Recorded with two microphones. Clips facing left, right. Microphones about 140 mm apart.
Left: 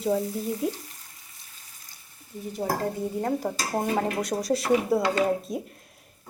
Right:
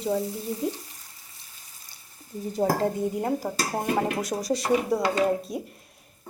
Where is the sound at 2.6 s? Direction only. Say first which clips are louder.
Right 4 dB; 40° right (ahead or behind).